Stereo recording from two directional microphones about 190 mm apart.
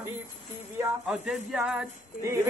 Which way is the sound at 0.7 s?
5° right (ahead or behind).